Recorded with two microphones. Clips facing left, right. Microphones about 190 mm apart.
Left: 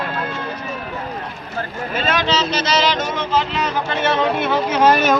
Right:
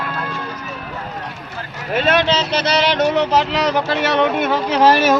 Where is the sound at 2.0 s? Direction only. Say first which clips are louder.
Right 4 dB; 65° right (ahead or behind).